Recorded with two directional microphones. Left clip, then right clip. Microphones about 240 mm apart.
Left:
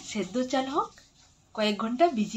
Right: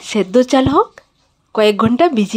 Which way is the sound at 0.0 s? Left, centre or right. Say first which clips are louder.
Right 18 dB; right.